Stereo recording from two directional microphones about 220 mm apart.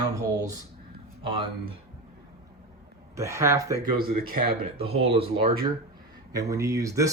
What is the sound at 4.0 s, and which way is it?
Speech, 40° right (ahead or behind).